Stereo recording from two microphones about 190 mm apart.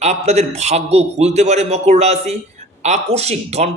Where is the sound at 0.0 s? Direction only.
35° right (ahead or behind).